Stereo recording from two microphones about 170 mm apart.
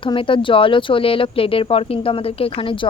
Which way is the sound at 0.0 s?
30° left (ahead or behind).